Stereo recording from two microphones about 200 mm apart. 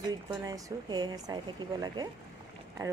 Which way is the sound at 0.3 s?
15° right (ahead or behind).